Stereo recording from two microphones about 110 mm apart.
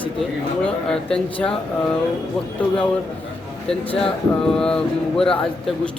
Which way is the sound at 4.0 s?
5° left (ahead or behind).